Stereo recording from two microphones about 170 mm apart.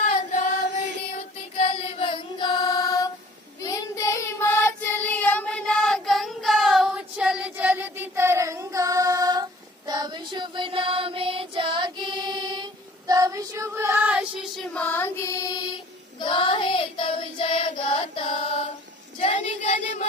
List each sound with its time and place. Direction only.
0.0 s chant: 45° left (ahead or behind)
1.1 s child singing: 35° left (ahead or behind); by 14.3 s 10° right (ahead or behind)
14.6 s child singing: 5° left (ahead or behind); by 19.7 s 40° left (ahead or behind)